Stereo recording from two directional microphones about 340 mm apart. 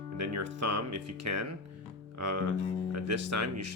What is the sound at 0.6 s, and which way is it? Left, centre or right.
Speech, right.